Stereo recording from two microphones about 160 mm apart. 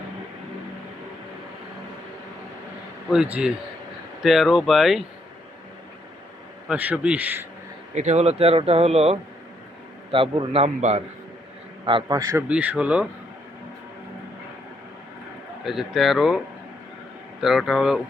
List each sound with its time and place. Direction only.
3.1 s speech: 5° right (ahead or behind)
6.7 s a man's voice: 10° right (ahead or behind)
7.9 s speech: 45° right (ahead or behind)
11.9 s a man's voice: 30° right (ahead or behind)
12.4 s a man's voice: 10° right (ahead or behind)
15.6 s speech: centre (ahead or behind)
17.4 s speech: centre (ahead or behind)